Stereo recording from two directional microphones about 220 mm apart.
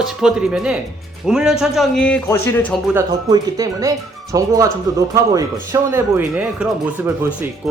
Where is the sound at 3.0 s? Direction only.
15° right (ahead or behind).